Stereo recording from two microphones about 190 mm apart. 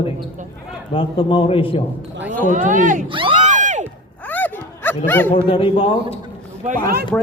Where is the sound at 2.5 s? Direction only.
40° right (ahead or behind).